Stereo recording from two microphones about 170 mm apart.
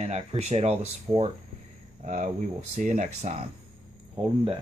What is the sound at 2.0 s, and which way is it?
Speech, 45° right (ahead or behind).